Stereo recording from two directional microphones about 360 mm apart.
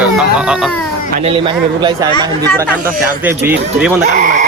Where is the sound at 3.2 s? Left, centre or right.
Centre.